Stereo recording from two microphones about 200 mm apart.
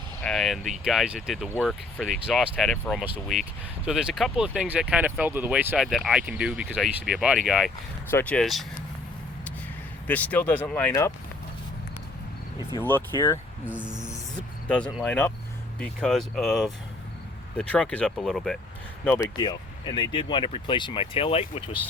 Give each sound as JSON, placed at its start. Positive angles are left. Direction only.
{"t": 0.2, "sound": "speech", "side_deg": 0}
{"t": 10.1, "sound": "speech", "side_deg": 10}
{"t": 12.8, "sound": "speech", "side_deg": 15}
{"t": 13.7, "sound": "music", "side_deg": -5}
{"t": 14.7, "sound": "speech", "side_deg": 5}
{"t": 19.0, "sound": "speech", "side_deg": 15}